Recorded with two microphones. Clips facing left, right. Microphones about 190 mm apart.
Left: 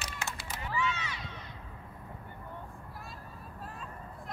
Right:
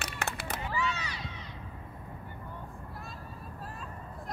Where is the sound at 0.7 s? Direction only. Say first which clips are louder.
Left 2 dB; 40° right (ahead or behind).